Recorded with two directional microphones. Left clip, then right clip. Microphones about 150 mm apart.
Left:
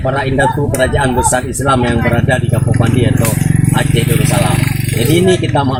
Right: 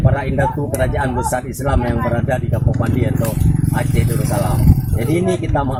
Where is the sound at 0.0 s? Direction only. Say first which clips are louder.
Left 5 dB; 15° right (ahead or behind).